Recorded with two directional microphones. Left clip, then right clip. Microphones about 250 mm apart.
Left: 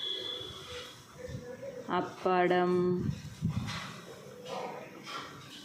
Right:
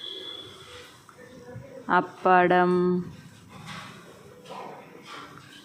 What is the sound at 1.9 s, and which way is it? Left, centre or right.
Speech, centre.